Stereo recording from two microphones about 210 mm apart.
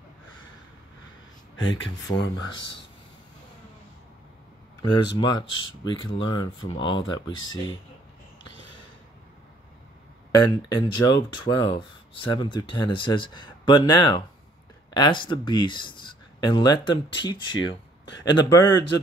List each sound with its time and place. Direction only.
1.6 s speech: 65° left (ahead or behind)
2.1 s speech: 25° left (ahead or behind)
4.8 s speech: 20° left (ahead or behind)
10.3 s speech: 20° left (ahead or behind)
18.0 s speech: 55° left (ahead or behind)
18.3 s speech: 20° left (ahead or behind)